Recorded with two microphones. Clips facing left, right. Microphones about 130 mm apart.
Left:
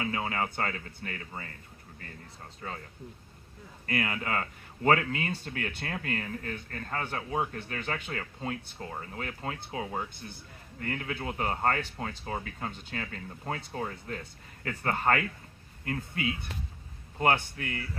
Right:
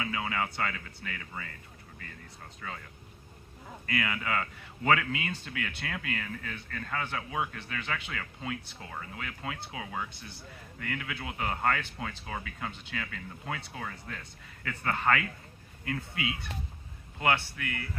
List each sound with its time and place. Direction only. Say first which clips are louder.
0.0 s a man's voice: left 1 dB; 35° left (ahead or behind)
2.6 s a man's voice: left 2 dB; 35° left (ahead or behind)
3.8 s a man's voice: left 1 dB; 40° left (ahead or behind)